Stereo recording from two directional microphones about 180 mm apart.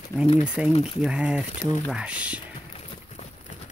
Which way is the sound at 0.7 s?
35° left (ahead or behind).